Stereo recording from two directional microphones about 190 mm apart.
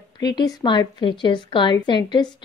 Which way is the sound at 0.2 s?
20° left (ahead or behind).